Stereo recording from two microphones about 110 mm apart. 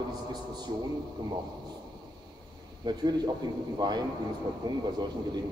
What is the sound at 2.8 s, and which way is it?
A man's voice, 40° right (ahead or behind).